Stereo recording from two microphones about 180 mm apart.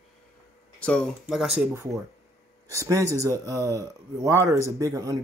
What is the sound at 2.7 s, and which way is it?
Speech, 20° right (ahead or behind).